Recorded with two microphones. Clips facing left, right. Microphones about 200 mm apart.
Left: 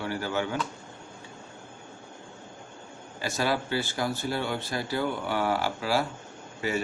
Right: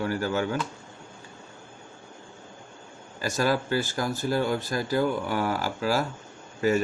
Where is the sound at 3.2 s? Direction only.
45° right (ahead or behind).